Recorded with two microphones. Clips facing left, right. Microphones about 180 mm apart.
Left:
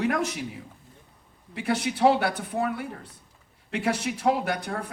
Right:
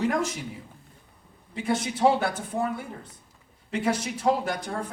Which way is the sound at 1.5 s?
65° left (ahead or behind).